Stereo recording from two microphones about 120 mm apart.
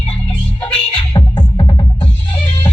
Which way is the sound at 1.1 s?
40° left (ahead or behind).